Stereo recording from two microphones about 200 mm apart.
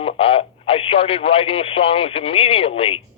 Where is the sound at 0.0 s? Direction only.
30° left (ahead or behind).